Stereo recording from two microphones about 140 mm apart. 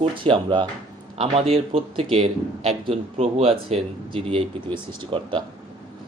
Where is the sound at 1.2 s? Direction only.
45° right (ahead or behind).